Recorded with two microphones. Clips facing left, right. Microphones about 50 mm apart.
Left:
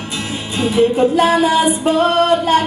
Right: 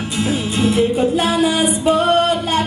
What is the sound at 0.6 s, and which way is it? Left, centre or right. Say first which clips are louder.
Music: right 1 dB; left.